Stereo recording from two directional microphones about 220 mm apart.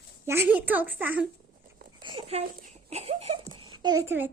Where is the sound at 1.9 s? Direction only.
20° right (ahead or behind).